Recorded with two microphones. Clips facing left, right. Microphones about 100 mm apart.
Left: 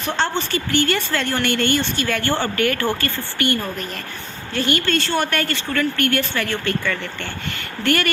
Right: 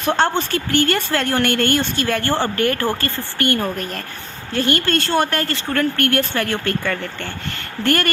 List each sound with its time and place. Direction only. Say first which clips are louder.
0.0 s a woman's voice: right 4 dB; 45° right (ahead or behind)